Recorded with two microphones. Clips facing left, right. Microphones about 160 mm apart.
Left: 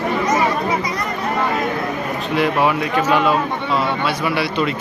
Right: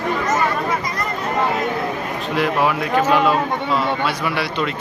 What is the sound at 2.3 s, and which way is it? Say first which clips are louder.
A man's voice: left 2 dB; centre (ahead or behind).